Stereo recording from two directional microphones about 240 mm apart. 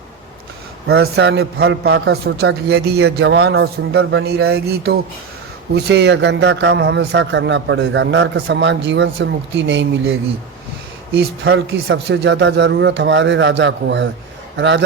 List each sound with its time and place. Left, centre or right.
0.9 s a man's voice: right
11.2 s a man's voice: right